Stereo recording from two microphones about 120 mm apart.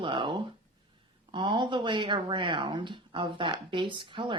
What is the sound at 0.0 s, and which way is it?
A woman's voice, 45° right (ahead or behind).